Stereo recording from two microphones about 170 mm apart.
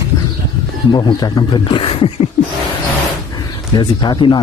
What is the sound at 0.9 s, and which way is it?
Speech, 25° left (ahead or behind).